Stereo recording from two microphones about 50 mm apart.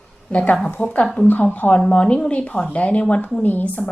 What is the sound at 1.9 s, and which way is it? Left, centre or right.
A woman's voice, left.